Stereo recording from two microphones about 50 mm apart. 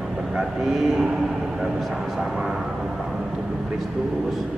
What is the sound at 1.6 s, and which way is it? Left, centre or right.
Speech, centre.